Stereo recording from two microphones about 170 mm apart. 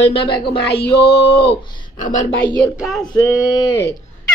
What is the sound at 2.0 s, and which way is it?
Speech, 45° left (ahead or behind).